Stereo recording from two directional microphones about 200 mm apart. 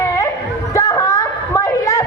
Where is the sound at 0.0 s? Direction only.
15° left (ahead or behind).